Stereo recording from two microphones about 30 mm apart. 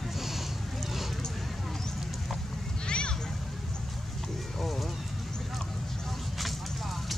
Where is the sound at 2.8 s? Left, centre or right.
Left.